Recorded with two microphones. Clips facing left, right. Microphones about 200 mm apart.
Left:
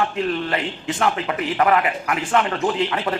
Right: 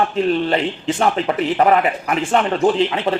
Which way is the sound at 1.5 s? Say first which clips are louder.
Right 2 dB; 30° right (ahead or behind).